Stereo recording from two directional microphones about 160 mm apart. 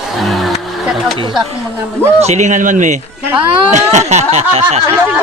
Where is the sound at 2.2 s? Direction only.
45° right (ahead or behind).